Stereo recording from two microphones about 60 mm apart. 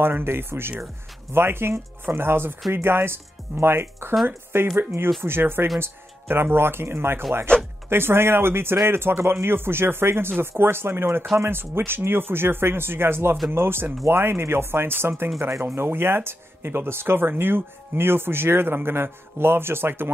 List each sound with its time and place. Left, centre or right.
0.0 s speech: right
4.1 s speech: centre
4.7 s speech: right